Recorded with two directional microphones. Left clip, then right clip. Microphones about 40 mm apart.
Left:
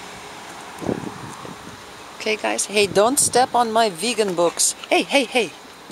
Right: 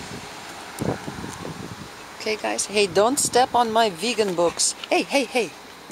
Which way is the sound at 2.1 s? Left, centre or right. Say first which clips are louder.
Left 3 dB; left.